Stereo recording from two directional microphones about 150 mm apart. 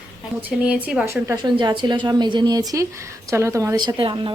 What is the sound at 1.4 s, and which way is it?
A woman's voice, 30° right (ahead or behind).